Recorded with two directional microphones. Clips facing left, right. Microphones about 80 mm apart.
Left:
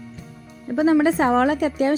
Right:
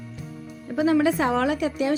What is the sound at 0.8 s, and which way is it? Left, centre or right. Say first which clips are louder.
A woman's voice: left 3 dB; left.